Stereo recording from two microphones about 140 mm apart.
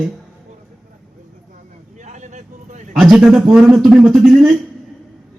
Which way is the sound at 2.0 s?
60° right (ahead or behind).